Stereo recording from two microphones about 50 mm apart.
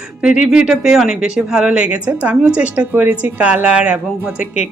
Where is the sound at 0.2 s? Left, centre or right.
Centre.